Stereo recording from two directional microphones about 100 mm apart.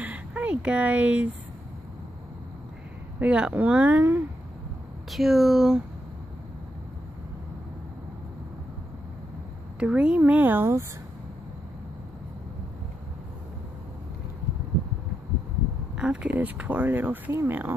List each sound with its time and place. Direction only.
0.0 s a sound: 15° right (ahead or behind)
3.2 s speech: 10° right (ahead or behind)
5.1 s speech: centre (ahead or behind)
9.8 s speech: 10° right (ahead or behind)
16.0 s speech: 10° right (ahead or behind)